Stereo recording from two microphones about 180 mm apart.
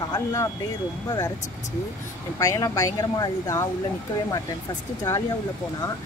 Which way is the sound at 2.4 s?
15° left (ahead or behind).